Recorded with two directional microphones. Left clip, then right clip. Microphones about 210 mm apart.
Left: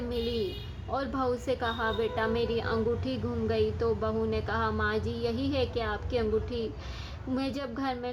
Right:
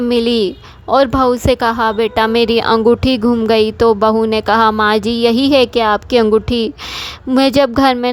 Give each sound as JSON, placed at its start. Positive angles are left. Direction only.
{"t": 0.1, "sound": "a woman's voice", "side_deg": -50}